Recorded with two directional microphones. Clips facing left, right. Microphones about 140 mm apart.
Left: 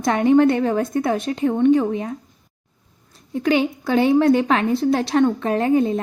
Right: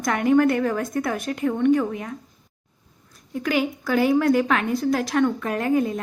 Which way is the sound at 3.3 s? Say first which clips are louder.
Left 4 dB; 25° left (ahead or behind).